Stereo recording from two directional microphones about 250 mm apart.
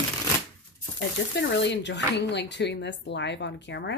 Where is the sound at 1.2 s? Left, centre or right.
Left.